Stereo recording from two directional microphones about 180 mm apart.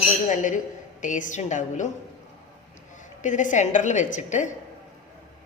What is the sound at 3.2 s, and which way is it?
A woman's voice, 45° left (ahead or behind).